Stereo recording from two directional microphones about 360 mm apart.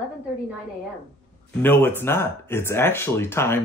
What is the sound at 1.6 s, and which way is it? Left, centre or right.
Speech, centre.